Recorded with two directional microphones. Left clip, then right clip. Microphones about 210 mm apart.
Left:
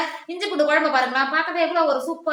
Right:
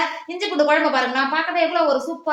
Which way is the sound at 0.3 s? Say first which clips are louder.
Right 2 dB; 35° right (ahead or behind).